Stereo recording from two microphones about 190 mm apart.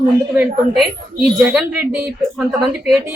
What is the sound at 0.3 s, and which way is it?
A woman's voice, 5° right (ahead or behind).